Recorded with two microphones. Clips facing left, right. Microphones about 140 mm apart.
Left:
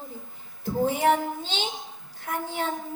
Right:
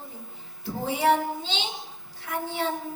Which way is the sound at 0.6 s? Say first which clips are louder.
Left 2 dB; 50° left (ahead or behind).